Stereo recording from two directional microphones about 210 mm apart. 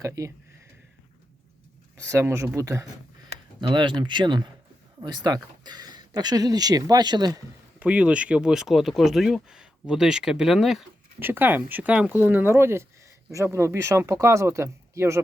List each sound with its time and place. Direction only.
0.0 s speech: 15° right (ahead or behind)
2.0 s speech: 15° right (ahead or behind)
7.9 s speech: 5° right (ahead or behind)